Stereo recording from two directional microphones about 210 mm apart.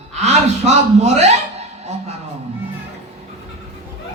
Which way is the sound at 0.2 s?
30° right (ahead or behind).